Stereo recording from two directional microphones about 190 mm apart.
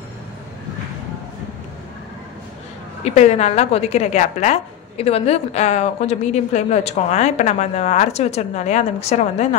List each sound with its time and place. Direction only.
3.0 s a woman's voice: 35° left (ahead or behind)